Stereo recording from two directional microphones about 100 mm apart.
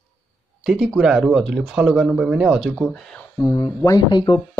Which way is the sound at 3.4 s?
40° left (ahead or behind).